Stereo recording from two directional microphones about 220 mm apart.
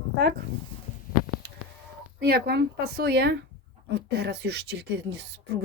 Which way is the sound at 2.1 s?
45° right (ahead or behind).